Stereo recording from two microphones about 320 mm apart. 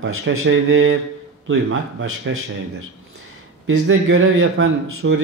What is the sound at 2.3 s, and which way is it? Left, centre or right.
Speech, right.